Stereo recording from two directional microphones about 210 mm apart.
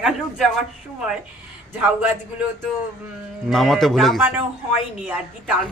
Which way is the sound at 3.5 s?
Centre (ahead or behind).